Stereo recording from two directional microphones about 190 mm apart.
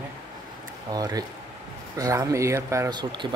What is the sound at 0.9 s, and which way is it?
Speech, 20° right (ahead or behind).